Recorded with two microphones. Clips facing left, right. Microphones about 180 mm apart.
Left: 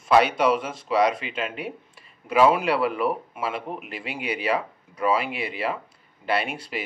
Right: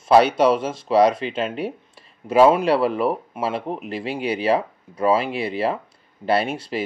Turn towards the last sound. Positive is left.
turn(degrees=-30)  # may be behind; listen again after turning